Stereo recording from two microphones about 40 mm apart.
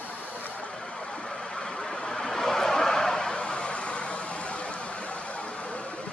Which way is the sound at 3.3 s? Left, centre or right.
Left.